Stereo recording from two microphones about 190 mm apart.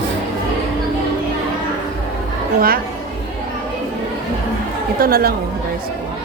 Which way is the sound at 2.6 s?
50° right (ahead or behind).